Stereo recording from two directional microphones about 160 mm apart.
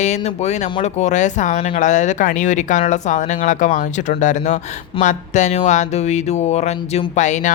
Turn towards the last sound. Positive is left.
turn(degrees=50)  # may be behind; listen again after turning